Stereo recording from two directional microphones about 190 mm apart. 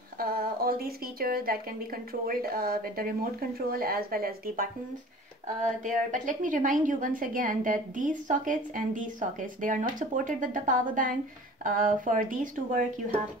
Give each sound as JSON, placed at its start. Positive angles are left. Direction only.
{"t": 0.2, "sound": "a woman's voice", "side_deg": -50}